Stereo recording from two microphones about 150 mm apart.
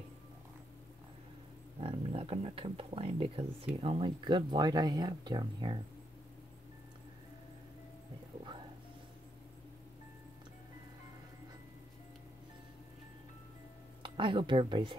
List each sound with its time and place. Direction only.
1.8 s speech: 40° right (ahead or behind)
14.0 s speech: 35° right (ahead or behind)